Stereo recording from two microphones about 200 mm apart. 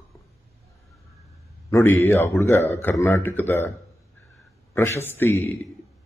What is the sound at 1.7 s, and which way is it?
A man's voice, 10° left (ahead or behind).